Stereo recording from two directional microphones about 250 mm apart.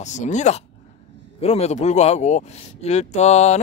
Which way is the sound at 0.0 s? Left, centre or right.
Left.